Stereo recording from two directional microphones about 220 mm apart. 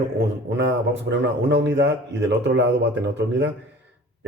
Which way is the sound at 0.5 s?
55° right (ahead or behind).